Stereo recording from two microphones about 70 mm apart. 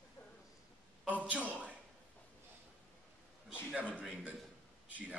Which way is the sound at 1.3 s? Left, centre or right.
Centre.